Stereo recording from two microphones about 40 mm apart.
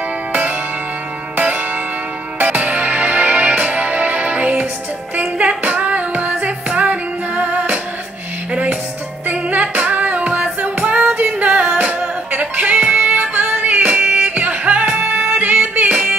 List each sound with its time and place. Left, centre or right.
0.3 s music: right
9.3 s music: right